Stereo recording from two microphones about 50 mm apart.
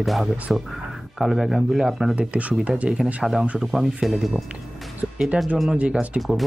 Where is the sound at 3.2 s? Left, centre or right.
Centre.